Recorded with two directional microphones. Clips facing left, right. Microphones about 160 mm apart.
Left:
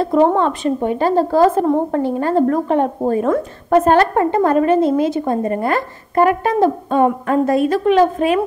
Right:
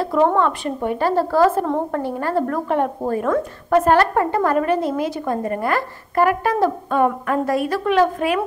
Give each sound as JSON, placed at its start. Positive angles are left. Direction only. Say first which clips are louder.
{"t": 0.0, "sound": "a woman's voice", "louder": "left 3 dB", "side_deg": 25}